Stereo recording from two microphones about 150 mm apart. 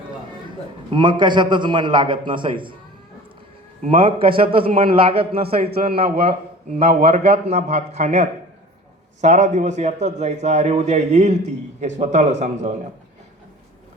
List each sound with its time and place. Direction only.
0.9 s a man's voice: 30° right (ahead or behind)
4.0 s a man's voice: 35° right (ahead or behind); by 12.7 s 50° right (ahead or behind)